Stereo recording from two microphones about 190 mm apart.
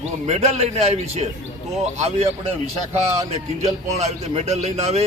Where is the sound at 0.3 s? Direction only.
35° right (ahead or behind).